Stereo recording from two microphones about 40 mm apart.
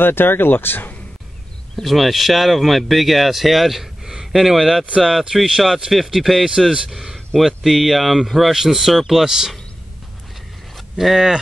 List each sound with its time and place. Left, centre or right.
0.0 s speech: left
1.8 s speech: centre
11.0 s speech: centre